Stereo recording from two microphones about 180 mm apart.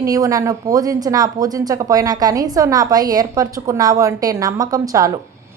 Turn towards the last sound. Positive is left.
turn(degrees=-20)  # may be behind; listen again after turning